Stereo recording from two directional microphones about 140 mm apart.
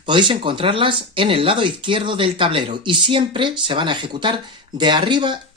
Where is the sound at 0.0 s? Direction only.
35° right (ahead or behind).